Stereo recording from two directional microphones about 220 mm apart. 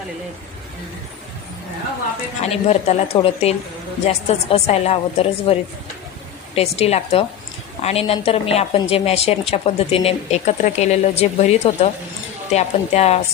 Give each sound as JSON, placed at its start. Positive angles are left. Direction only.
{"t": 2.4, "sound": "speech", "side_deg": 30}
{"t": 6.6, "sound": "speech", "side_deg": 30}